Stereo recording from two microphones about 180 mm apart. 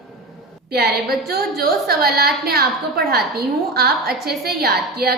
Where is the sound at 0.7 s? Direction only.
60° right (ahead or behind).